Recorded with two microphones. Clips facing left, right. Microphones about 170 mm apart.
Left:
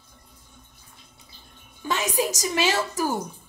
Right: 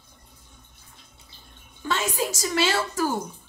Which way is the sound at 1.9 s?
15° left (ahead or behind).